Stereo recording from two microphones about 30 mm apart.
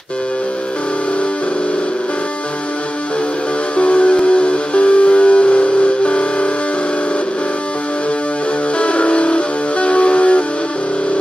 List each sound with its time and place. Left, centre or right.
3.7 s music: left
8.7 s music: left